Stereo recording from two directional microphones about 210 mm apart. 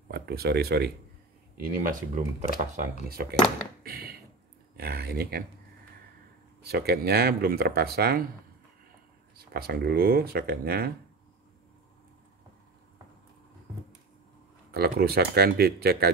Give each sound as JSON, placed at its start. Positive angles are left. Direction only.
{"t": 0.1, "sound": "speech", "side_deg": -50}
{"t": 3.8, "sound": "a sound", "side_deg": -45}
{"t": 4.7, "sound": "speech", "side_deg": -50}
{"t": 6.7, "sound": "speech", "side_deg": -50}
{"t": 9.4, "sound": "speech", "side_deg": -50}
{"t": 14.7, "sound": "speech", "side_deg": -50}